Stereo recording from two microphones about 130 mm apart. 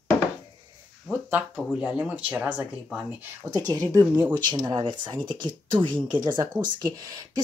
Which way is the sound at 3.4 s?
25° right (ahead or behind).